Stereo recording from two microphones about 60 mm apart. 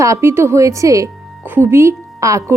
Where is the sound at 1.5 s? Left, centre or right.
Right.